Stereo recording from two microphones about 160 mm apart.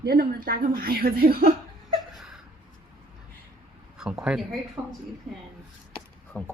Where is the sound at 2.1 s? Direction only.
Centre (ahead or behind).